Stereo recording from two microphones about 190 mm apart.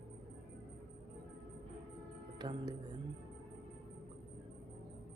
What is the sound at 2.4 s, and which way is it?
Speech, 20° right (ahead or behind).